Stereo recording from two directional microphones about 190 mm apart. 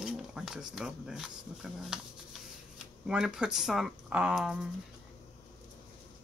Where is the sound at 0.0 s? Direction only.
Centre (ahead or behind).